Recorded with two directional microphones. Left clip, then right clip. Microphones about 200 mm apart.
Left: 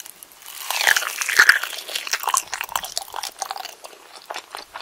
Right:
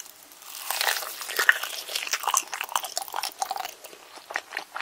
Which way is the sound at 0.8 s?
25° left (ahead or behind).